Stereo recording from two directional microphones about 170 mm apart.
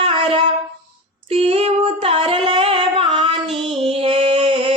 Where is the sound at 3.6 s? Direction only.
30° right (ahead or behind).